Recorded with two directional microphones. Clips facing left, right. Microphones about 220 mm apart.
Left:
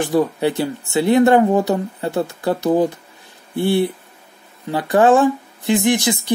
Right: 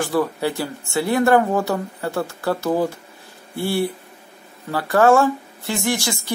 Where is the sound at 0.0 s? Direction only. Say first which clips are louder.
Left 4 dB; 20° left (ahead or behind).